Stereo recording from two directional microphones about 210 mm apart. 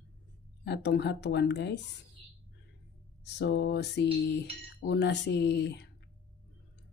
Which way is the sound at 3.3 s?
55° left (ahead or behind).